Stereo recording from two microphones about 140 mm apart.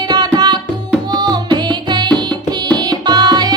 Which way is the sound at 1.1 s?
30° right (ahead or behind).